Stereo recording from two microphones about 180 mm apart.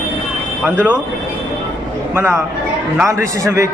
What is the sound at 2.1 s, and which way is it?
A man's voice, 15° right (ahead or behind).